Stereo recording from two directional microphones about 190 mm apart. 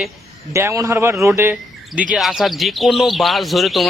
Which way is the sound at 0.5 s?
15° right (ahead or behind).